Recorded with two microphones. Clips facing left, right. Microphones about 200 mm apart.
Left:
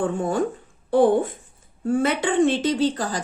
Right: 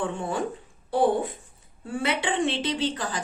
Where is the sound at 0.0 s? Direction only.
45° left (ahead or behind).